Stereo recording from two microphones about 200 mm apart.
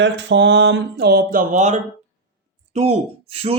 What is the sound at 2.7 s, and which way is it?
Speech, 35° right (ahead or behind).